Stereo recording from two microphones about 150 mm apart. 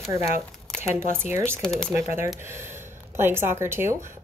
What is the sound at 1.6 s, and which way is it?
Speech, 5° left (ahead or behind).